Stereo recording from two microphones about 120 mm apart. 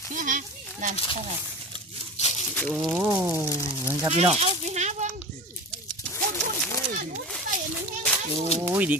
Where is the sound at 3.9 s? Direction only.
15° right (ahead or behind).